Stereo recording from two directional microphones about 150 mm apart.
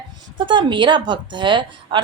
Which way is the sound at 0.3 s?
30° right (ahead or behind).